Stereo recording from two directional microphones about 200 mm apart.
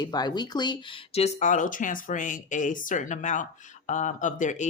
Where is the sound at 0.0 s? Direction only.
20° left (ahead or behind).